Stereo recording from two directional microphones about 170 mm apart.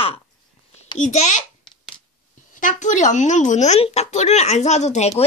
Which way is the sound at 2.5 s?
50° left (ahead or behind).